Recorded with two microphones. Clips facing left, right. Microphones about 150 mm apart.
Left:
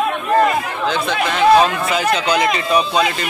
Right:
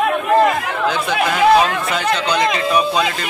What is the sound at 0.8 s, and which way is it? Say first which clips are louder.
Speech: right 2 dB; 10° right (ahead or behind).